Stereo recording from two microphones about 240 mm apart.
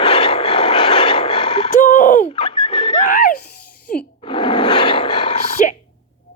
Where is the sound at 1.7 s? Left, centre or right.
Left.